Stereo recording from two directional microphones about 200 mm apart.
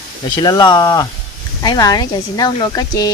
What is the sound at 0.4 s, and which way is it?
Speech, 20° left (ahead or behind).